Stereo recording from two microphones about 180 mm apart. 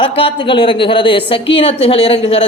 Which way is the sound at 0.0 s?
30° left (ahead or behind).